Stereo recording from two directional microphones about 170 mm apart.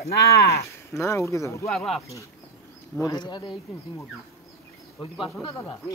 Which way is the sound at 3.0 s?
25° left (ahead or behind).